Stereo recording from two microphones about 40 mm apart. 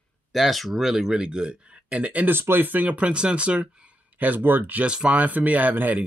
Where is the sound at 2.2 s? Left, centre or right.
Right.